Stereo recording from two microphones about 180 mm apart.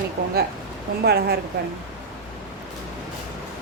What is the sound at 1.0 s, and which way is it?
Speech, 60° right (ahead or behind).